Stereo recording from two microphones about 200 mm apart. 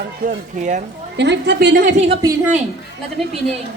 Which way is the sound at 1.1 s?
60° right (ahead or behind).